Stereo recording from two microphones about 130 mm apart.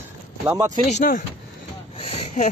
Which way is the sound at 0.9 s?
75° left (ahead or behind).